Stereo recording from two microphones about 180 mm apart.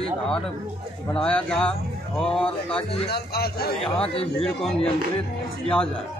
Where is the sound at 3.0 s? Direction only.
60° left (ahead or behind).